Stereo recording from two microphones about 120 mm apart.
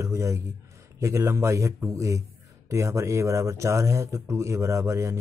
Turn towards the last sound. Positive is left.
turn(degrees=-25)  # may be behind; listen again after turning